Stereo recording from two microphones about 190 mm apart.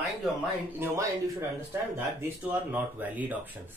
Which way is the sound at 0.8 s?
15° right (ahead or behind).